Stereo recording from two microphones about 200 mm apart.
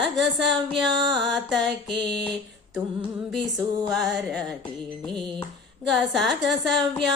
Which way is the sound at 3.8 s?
Centre (ahead or behind).